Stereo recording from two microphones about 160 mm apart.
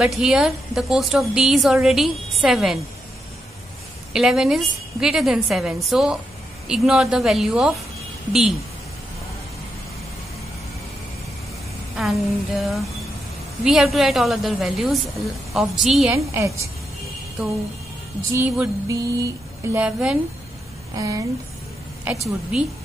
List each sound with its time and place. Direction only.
0.0 s a woman's voice: 5° right (ahead or behind)
4.1 s a woman's voice: 5° right (ahead or behind)
12.0 s a woman's voice: centre (ahead or behind)
16.1 s music: 20° right (ahead or behind)
18.3 s music: 15° right (ahead or behind)
19.8 s a woman's voice: 5° right (ahead or behind)
20.9 s speech: 20° right (ahead or behind)
22.1 s music: 10° right (ahead or behind)